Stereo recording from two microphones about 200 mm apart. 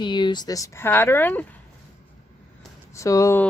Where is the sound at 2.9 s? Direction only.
15° left (ahead or behind).